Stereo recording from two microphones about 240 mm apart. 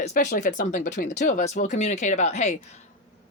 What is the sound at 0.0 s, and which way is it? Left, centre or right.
Speech, left.